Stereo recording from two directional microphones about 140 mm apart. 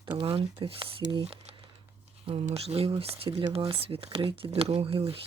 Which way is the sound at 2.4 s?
45° right (ahead or behind).